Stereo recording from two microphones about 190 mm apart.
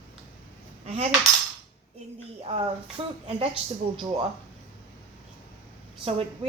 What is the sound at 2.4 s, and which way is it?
Speech, 30° right (ahead or behind).